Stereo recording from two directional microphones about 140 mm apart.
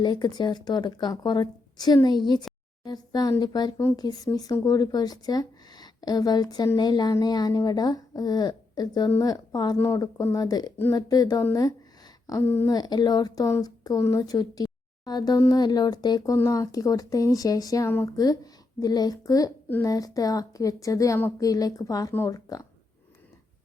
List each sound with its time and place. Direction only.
0.0 s a woman's voice: 30° left (ahead or behind)